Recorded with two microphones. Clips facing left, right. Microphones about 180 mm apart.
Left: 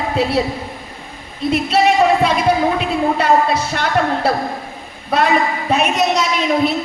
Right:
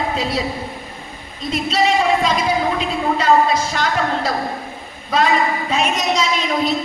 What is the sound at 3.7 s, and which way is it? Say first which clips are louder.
A woman's voice: left 2 dB; 60° left (ahead or behind).